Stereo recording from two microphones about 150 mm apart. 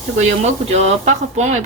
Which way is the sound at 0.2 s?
50° right (ahead or behind).